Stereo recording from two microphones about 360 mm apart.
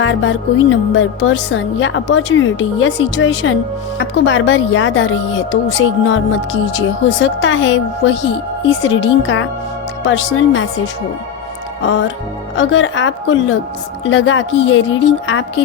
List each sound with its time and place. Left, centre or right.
0.0 s a woman's voice: left
11.8 s a woman's voice: left